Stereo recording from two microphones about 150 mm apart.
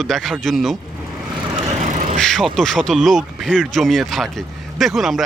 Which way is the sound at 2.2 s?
5° left (ahead or behind).